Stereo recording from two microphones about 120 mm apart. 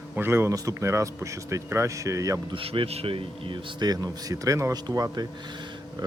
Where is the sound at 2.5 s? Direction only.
50° right (ahead or behind); by 5.3 s 30° right (ahead or behind).